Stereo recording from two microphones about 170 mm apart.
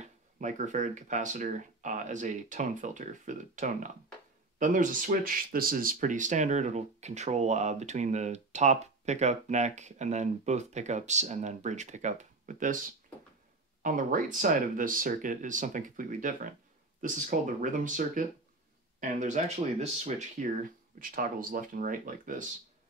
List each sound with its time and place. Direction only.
0.0 s speech: 45° right (ahead or behind)
13.8 s speech: 50° right (ahead or behind)